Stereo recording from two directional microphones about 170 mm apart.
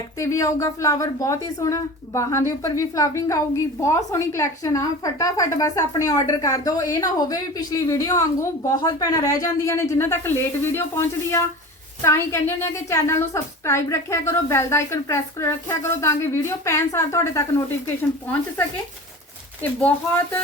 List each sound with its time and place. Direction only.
0.2 s a woman's voice: 20° left (ahead or behind)
19.6 s a woman's voice: 10° left (ahead or behind)